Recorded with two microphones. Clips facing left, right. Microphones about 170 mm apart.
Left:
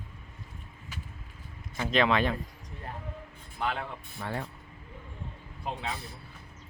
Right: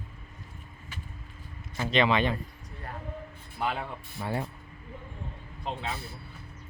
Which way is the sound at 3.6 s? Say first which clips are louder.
Right 1 dB; 5° right (ahead or behind).